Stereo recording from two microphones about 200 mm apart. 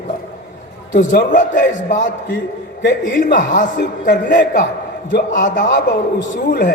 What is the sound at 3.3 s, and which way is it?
A man's voice, 40° left (ahead or behind).